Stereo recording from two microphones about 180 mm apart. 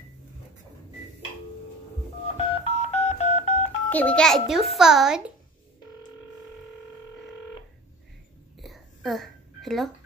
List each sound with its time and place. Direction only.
2.3 s telephone dialing: 30° left (ahead or behind)
3.9 s a child's voice: 5° left (ahead or behind)
8.5 s a sound: centre (ahead or behind)